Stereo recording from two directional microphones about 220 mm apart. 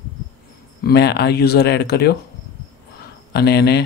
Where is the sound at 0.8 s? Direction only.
45° left (ahead or behind).